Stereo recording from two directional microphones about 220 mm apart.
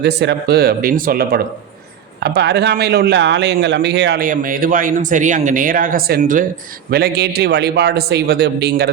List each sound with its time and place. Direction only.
0.0 s speech: 50° right (ahead or behind)
4.3 s speech: 40° right (ahead or behind)